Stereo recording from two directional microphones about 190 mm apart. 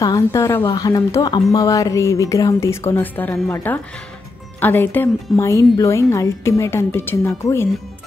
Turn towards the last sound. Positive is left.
turn(degrees=15)  # may be behind; listen again after turning